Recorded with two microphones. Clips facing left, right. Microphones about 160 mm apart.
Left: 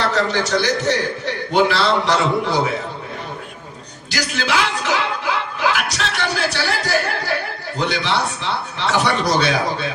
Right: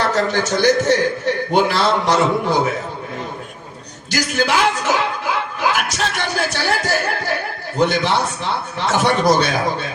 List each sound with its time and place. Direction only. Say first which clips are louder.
0.1 s a man's voice: right 1 dB; 45° right (ahead or behind)
4.1 s a man's voice: right 3 dB; 50° right (ahead or behind)